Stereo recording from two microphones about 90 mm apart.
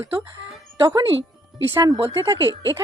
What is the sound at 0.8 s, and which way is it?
Speech, 60° right (ahead or behind).